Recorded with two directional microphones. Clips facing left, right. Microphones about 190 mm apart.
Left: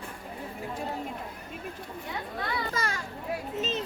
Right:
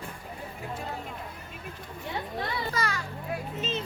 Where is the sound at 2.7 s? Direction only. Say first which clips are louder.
Right 1 dB; 50° left (ahead or behind).